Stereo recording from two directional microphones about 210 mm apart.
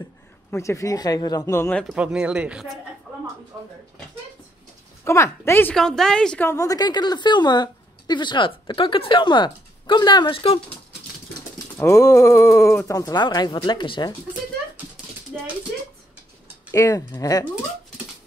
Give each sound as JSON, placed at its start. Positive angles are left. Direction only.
{"t": 0.5, "sound": "speech", "side_deg": 15}
{"t": 5.0, "sound": "speech", "side_deg": 15}
{"t": 11.8, "sound": "speech", "side_deg": 15}
{"t": 15.3, "sound": "speech", "side_deg": -5}
{"t": 16.7, "sound": "speech", "side_deg": 15}